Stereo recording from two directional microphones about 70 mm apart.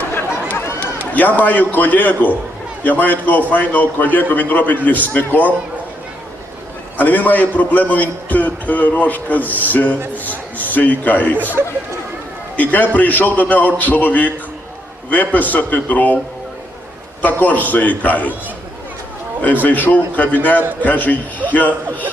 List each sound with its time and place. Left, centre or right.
0.8 s a man's voice: left
6.9 s a man's voice: left
12.5 s a man's voice: left
17.2 s a man's voice: left
19.6 s a man's voice: left